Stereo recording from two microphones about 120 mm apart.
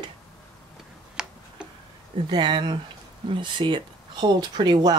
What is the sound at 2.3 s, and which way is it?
Speech, 40° right (ahead or behind).